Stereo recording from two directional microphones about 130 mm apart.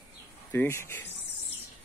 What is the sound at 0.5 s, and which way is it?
Speech, 20° left (ahead or behind).